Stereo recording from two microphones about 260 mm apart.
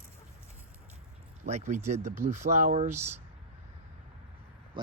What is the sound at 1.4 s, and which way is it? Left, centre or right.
Speech, right.